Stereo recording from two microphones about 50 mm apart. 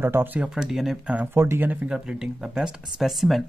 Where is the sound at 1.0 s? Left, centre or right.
Right.